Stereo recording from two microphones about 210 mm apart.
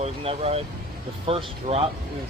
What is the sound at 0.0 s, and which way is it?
Speech, 30° right (ahead or behind).